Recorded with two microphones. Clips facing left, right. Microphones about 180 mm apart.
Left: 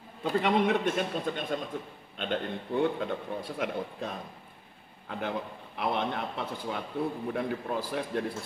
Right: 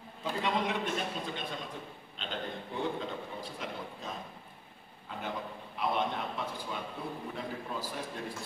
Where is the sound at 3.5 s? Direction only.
60° left (ahead or behind).